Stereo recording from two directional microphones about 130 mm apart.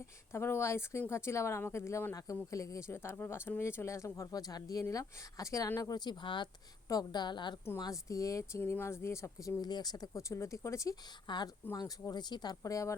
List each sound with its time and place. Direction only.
0.3 s speech: 20° left (ahead or behind)
11.3 s speech: 35° left (ahead or behind)